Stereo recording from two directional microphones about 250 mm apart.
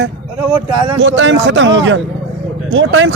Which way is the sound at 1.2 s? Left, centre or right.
Right.